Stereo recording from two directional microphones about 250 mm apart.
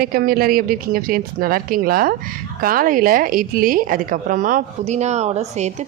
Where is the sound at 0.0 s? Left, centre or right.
Right.